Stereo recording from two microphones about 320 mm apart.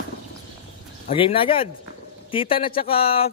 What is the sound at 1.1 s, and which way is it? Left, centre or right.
Speech, centre.